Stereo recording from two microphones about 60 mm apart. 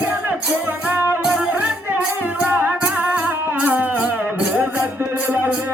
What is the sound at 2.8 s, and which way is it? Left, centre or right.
Music, right.